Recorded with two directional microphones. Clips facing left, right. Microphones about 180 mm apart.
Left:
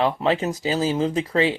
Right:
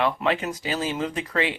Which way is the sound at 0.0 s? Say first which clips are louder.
Left 3 dB; 30° left (ahead or behind).